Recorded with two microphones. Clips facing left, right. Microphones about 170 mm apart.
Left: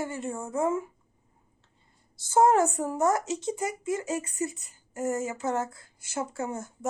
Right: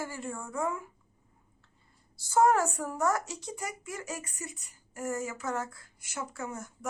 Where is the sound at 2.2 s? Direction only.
25° left (ahead or behind).